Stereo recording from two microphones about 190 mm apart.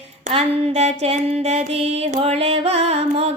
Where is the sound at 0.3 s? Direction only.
35° right (ahead or behind).